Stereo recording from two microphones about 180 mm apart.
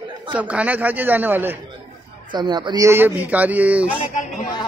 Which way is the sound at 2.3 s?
25° right (ahead or behind).